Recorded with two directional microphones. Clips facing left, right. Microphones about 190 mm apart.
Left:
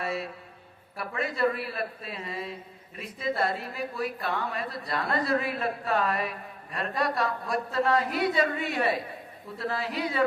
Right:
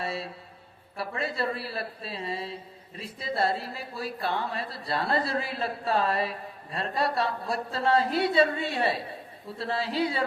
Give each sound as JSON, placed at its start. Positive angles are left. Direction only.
{"t": 0.0, "sound": "music", "side_deg": -30}
{"t": 0.9, "sound": "speech", "side_deg": -30}